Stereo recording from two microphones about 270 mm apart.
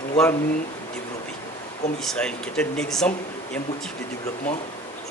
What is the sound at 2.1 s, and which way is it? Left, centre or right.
Speech, centre.